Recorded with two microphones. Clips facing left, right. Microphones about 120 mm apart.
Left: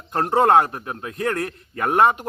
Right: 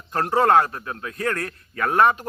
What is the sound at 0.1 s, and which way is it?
Speech, 25° left (ahead or behind).